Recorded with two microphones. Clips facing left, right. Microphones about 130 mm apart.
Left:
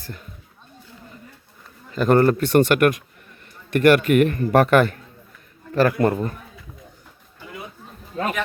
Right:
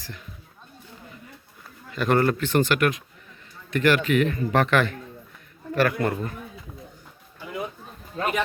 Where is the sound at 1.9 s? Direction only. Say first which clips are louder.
Left 5 dB; 40° left (ahead or behind).